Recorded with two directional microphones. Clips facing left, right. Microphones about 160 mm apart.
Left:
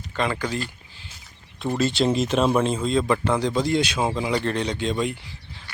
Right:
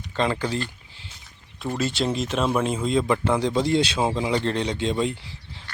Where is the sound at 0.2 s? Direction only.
30° right (ahead or behind).